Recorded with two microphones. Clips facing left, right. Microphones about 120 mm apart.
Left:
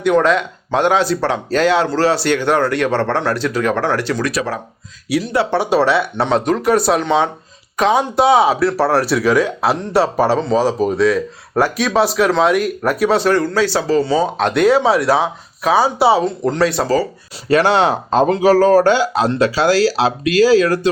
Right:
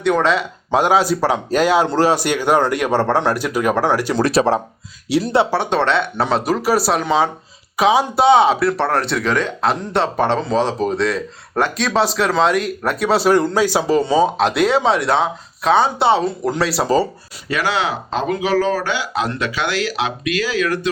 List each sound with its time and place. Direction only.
0.0 s speech: centre (ahead or behind)
4.1 s speech: 30° right (ahead or behind)
5.5 s speech: 5° left (ahead or behind)
13.3 s speech: 15° right (ahead or behind)
14.3 s speech: centre (ahead or behind)
16.8 s speech: 20° right (ahead or behind)
17.5 s speech: 40° left (ahead or behind)